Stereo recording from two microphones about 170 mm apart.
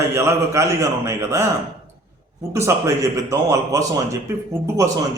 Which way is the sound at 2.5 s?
15° right (ahead or behind).